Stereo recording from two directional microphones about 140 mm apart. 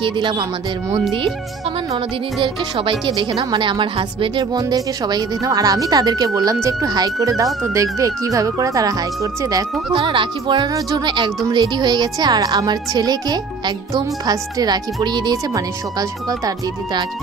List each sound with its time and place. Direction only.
0.0 s speech: 35° right (ahead or behind)
2.4 s speech: 35° right (ahead or behind)
9.9 s speech: 35° right (ahead or behind)